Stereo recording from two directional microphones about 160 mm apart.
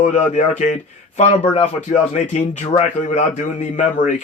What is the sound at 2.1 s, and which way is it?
Speech, 50° left (ahead or behind).